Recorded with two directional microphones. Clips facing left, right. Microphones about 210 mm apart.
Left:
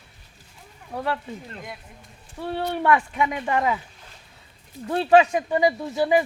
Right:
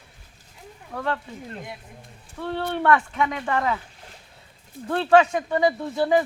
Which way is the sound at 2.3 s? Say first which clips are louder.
Even; 15° left (ahead or behind).